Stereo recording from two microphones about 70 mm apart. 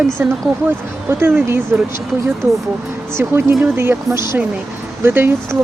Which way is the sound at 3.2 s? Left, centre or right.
Right.